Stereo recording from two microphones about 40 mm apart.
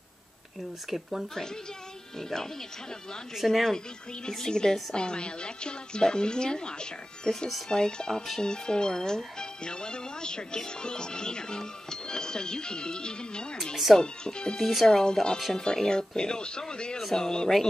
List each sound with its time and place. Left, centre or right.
0.8 s speech: centre
2.1 s speech: centre
4.3 s speech: centre
14.6 s speech: centre
14.9 s speech: centre